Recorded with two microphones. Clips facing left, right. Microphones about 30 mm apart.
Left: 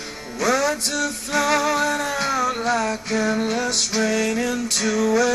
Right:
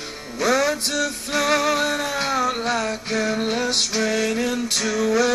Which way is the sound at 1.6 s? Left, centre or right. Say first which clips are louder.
Even; right.